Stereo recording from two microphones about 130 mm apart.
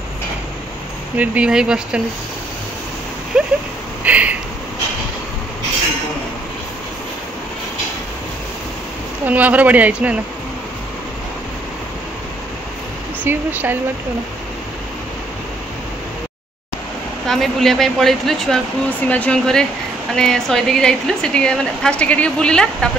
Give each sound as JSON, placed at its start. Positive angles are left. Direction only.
{"t": 1.1, "sound": "speech", "side_deg": -10}
{"t": 3.3, "sound": "a sound", "side_deg": -5}
{"t": 9.2, "sound": "speech", "side_deg": -10}
{"t": 13.2, "sound": "speech", "side_deg": -15}
{"t": 17.3, "sound": "a woman's voice", "side_deg": 0}